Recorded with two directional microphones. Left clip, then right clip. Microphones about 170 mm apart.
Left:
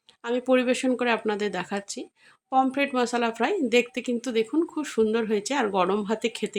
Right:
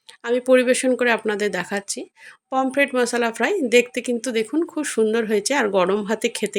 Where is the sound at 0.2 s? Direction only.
15° right (ahead or behind).